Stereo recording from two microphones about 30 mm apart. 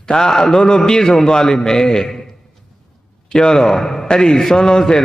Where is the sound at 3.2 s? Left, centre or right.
Left.